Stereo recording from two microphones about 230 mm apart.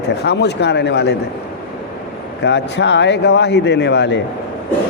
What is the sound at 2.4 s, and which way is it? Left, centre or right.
A man's voice, left.